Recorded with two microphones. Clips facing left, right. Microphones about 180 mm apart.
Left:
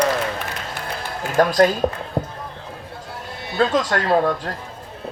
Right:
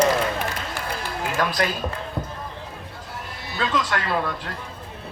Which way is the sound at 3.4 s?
50° left (ahead or behind).